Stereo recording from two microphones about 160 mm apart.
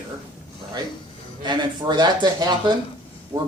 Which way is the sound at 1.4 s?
30° right (ahead or behind).